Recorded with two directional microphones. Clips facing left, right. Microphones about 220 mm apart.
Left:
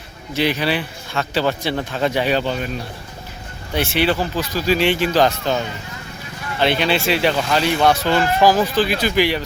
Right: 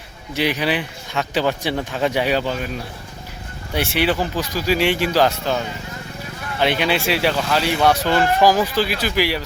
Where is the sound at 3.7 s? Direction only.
10° right (ahead or behind).